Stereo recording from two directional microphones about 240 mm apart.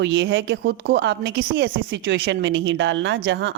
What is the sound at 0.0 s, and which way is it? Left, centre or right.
A woman's voice, right.